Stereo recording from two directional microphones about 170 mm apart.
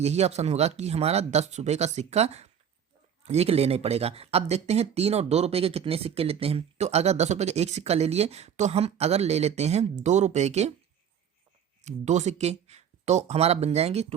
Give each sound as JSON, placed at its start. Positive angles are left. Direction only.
{"t": 0.0, "sound": "speech", "side_deg": -40}
{"t": 11.8, "sound": "speech", "side_deg": -45}